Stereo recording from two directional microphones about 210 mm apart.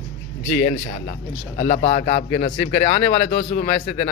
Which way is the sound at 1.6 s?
30° left (ahead or behind).